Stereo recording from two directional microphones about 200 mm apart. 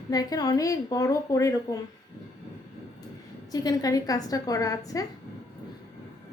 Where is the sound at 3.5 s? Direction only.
20° left (ahead or behind).